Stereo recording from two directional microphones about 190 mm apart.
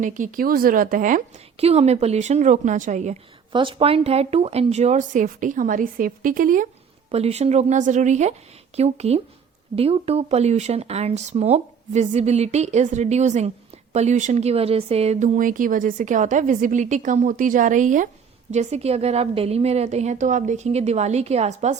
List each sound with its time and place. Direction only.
0.0 s speech: 45° right (ahead or behind)
3.5 s speech: 25° right (ahead or behind); by 6.7 s 45° right (ahead or behind)
7.1 s speech: 35° right (ahead or behind)